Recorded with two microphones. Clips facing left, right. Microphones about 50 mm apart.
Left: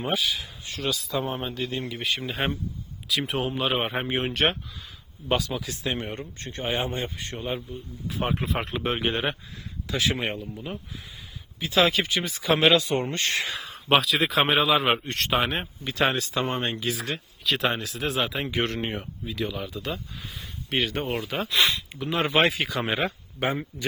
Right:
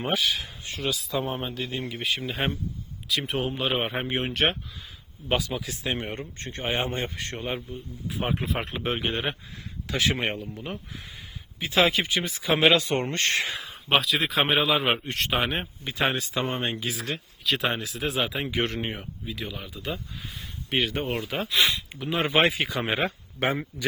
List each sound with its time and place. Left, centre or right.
0.1 s speech: right
0.3 s a sound: right
0.9 s speech: centre
5.6 s speech: right
8.0 s speech: centre
9.9 s speech: right
11.6 s speech: right
11.9 s speech: centre
12.7 s speech: right
13.9 s speech: centre
15.8 s speech: centre
22.1 s speech: right